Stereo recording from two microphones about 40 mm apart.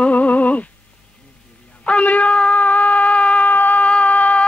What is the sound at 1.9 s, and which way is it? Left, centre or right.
Shofar, left.